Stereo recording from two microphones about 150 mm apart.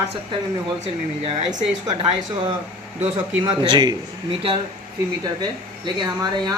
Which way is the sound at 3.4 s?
35° right (ahead or behind).